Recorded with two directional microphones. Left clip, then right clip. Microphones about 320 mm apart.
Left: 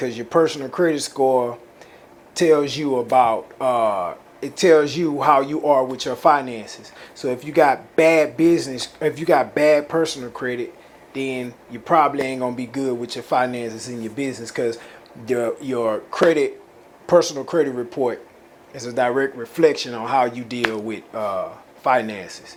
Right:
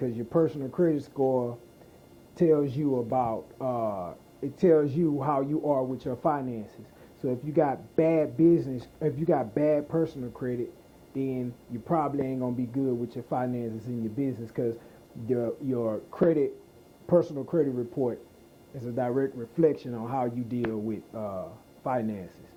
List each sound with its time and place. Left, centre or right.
0.0 s speech: centre
1.1 s speech: centre
2.3 s speech: centre